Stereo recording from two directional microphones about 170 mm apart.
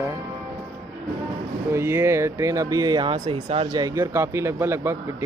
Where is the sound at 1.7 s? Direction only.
15° right (ahead or behind).